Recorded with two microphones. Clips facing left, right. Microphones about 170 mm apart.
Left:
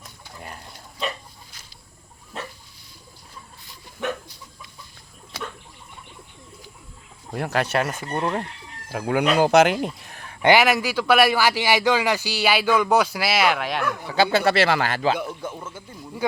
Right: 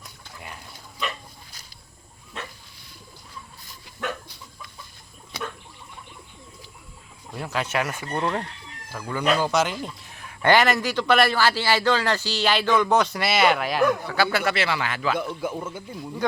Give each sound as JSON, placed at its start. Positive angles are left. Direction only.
{"t": 7.3, "sound": "speech", "side_deg": 60}
{"t": 7.7, "sound": "speech", "side_deg": 35}
{"t": 7.9, "sound": "a man's voice", "side_deg": 15}
{"t": 8.9, "sound": "speech", "side_deg": 70}
{"t": 10.4, "sound": "a man's voice", "side_deg": 10}
{"t": 14.1, "sound": "speech", "side_deg": 20}
{"t": 14.5, "sound": "speech", "side_deg": 45}
{"t": 15.5, "sound": "speech", "side_deg": -15}